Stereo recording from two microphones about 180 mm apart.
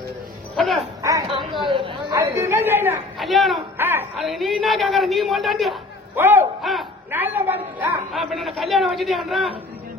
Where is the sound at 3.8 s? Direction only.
10° right (ahead or behind).